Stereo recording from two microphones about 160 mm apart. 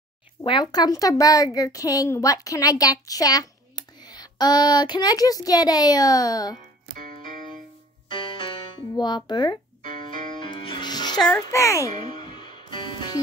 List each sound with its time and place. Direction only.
0.4 s a woman's voice: 30° left (ahead or behind)
8.1 s music: 30° left (ahead or behind)
9.9 s music: 55° right (ahead or behind)
10.4 s music: 30° left (ahead or behind)
11.5 s a woman's voice: 20° left (ahead or behind)
12.2 s music: 30° left (ahead or behind)